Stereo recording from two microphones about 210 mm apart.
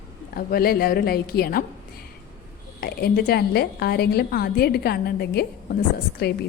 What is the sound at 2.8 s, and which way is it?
A woman's voice, 45° left (ahead or behind).